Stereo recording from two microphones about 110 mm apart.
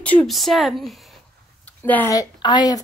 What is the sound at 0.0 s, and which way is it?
Speech, 10° left (ahead or behind).